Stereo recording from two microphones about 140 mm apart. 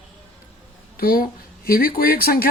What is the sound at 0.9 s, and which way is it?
Speech, 90° left.